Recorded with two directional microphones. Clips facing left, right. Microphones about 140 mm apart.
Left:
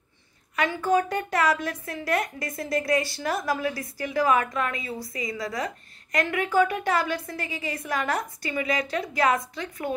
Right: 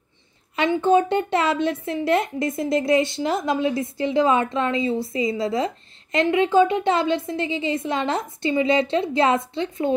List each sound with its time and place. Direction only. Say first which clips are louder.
0.6 s a woman's voice: right 5 dB; 25° right (ahead or behind)